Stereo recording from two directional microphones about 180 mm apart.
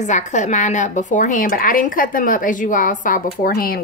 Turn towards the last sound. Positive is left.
turn(degrees=55)  # may be behind; listen again after turning